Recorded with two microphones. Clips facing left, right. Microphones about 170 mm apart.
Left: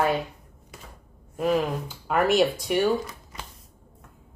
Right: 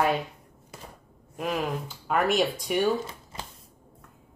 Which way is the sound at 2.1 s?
5° left (ahead or behind).